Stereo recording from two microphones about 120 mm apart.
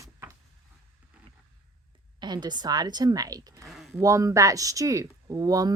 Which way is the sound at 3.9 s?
25° right (ahead or behind).